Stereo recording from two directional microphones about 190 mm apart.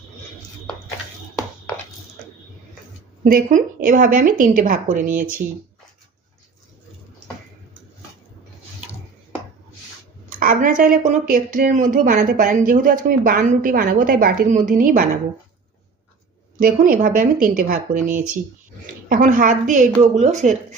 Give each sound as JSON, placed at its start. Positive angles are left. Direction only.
{"t": 1.4, "sound": "a sound", "side_deg": 15}
{"t": 3.2, "sound": "speech", "side_deg": -45}
{"t": 10.2, "sound": "speech", "side_deg": -45}
{"t": 16.6, "sound": "speech", "side_deg": -45}
{"t": 19.0, "sound": "speech", "side_deg": -45}